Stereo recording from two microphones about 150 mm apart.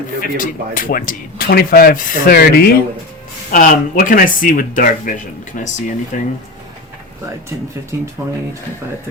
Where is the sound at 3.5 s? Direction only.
65° left (ahead or behind).